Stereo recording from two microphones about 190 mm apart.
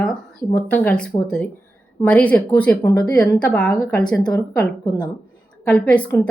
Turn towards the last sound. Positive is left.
turn(degrees=5)  # may be behind; listen again after turning